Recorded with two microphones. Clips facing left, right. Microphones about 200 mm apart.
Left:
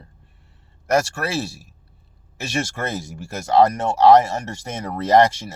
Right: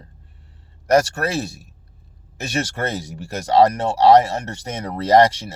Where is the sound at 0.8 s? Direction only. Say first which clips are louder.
Right 3 dB; 40° right (ahead or behind).